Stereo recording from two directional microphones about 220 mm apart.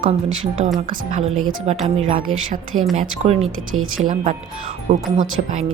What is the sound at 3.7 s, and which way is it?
Speech, 65° right (ahead or behind).